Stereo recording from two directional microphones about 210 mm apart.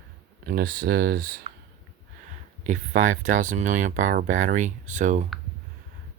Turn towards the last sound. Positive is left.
turn(degrees=-35)  # may be behind; listen again after turning